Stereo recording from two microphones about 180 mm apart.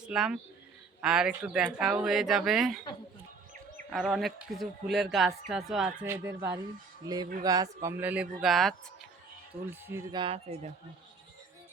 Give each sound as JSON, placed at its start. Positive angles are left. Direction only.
{"t": 0.1, "sound": "speech", "side_deg": -5}
{"t": 3.8, "sound": "speech", "side_deg": -5}
{"t": 7.0, "sound": "speech", "side_deg": -20}
{"t": 9.6, "sound": "speech", "side_deg": -15}
{"t": 10.1, "sound": "speech", "side_deg": -30}